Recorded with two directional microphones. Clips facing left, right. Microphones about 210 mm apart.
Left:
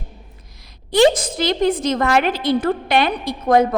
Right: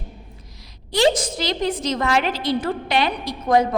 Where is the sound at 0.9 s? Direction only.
55° left (ahead or behind).